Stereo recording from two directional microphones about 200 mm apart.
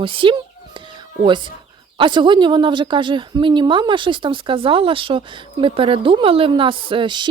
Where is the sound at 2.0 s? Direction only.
25° right (ahead or behind).